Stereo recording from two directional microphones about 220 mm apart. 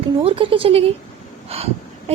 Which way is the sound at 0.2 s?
25° right (ahead or behind).